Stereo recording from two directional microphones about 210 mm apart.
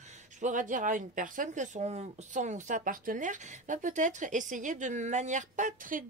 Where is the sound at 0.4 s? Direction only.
35° right (ahead or behind).